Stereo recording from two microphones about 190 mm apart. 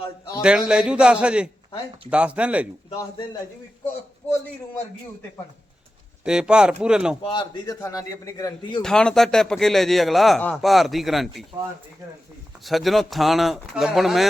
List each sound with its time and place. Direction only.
0.4 s speech: 5° right (ahead or behind)
6.2 s speech: 5° right (ahead or behind)
7.2 s a man's voice: 25° left (ahead or behind)
8.8 s speech: 5° left (ahead or behind)
12.6 s speech: centre (ahead or behind)